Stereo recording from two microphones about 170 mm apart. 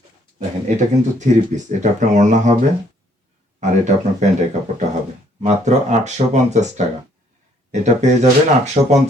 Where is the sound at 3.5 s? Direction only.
45° right (ahead or behind).